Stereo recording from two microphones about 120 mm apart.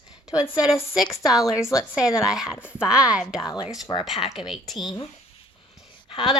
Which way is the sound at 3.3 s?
35° left (ahead or behind).